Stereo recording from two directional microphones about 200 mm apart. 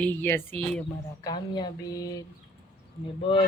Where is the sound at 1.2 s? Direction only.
20° left (ahead or behind).